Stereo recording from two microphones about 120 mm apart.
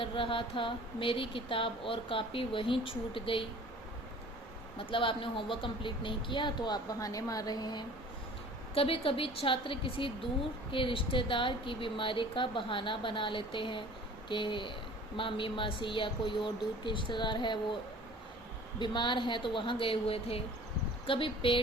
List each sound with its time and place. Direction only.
0.0 s a woman's voice: 50° left (ahead or behind)
4.8 s speech: 45° left (ahead or behind)
8.7 s a woman's voice: 50° left (ahead or behind)
18.8 s a woman's voice: 40° left (ahead or behind)